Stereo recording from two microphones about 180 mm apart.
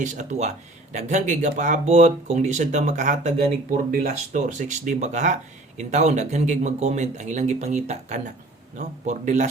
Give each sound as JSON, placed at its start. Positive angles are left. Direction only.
{"t": 0.0, "sound": "speech", "side_deg": -40}